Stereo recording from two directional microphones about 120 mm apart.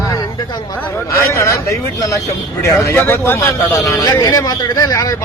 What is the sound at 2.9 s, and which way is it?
A man's voice, 20° left (ahead or behind).